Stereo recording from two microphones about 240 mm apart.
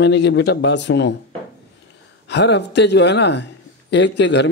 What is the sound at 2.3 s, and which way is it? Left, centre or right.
Speech, left.